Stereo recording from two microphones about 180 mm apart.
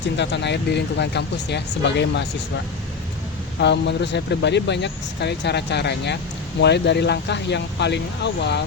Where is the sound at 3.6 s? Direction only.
70° left (ahead or behind).